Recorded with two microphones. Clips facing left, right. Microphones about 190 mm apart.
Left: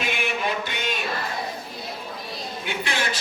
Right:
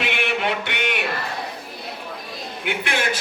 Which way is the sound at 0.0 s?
70° right (ahead or behind).